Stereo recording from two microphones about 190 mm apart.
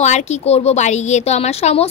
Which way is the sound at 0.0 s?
35° left (ahead or behind).